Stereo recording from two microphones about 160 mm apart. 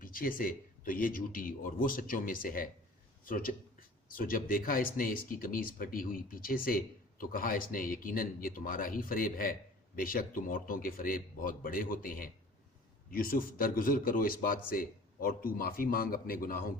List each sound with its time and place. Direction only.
0.0 s speech: 60° left (ahead or behind)